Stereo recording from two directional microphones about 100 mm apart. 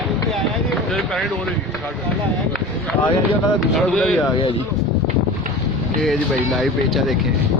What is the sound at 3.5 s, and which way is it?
Speech, centre (ahead or behind).